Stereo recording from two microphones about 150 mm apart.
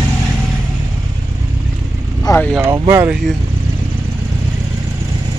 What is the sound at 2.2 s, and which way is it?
Vehicle, 15° left (ahead or behind).